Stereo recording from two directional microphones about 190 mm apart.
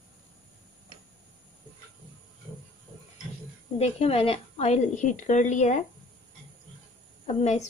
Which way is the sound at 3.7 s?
35° left (ahead or behind).